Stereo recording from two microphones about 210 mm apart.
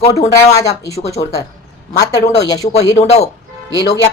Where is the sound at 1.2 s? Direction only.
35° left (ahead or behind).